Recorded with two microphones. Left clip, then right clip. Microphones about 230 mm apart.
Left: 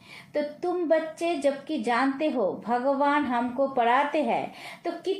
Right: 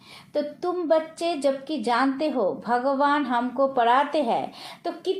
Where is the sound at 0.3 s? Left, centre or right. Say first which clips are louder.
Right 1 dB; right.